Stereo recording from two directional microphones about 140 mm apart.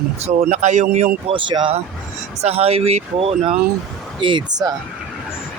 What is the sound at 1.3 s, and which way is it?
Speech, 35° right (ahead or behind).